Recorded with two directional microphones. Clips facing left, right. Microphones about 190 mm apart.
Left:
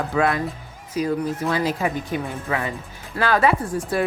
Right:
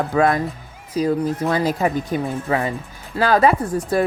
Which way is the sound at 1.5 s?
40° right (ahead or behind).